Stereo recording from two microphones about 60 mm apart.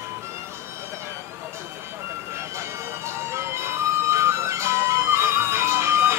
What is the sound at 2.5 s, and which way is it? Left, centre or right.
Music, right.